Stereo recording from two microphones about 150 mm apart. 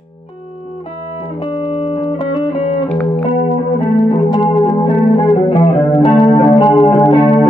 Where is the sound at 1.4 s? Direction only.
35° left (ahead or behind).